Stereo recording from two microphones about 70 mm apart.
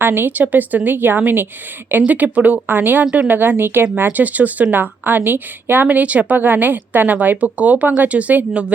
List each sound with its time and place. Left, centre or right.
0.0 s a woman's voice: right
3.3 s a woman's voice: right